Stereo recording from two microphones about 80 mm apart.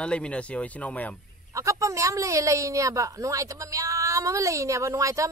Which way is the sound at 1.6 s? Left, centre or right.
Right.